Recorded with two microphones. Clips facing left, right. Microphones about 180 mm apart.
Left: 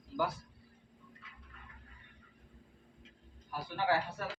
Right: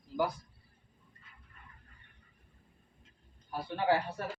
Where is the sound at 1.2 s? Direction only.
90° left.